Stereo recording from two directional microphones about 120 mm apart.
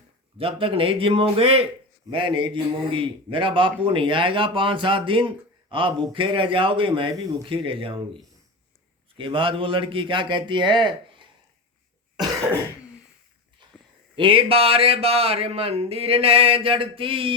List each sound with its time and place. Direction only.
0.3 s a man's voice: 50° right (ahead or behind)
2.0 s a man's voice: 45° right (ahead or behind)
14.2 s a man's voice: 45° right (ahead or behind)